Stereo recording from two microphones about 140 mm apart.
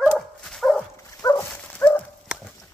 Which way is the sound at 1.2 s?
25° left (ahead or behind).